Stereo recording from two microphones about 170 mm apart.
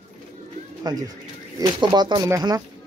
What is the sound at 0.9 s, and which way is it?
Speech, 25° right (ahead or behind).